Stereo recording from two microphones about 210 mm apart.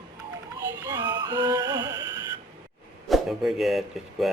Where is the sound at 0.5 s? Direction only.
15° right (ahead or behind).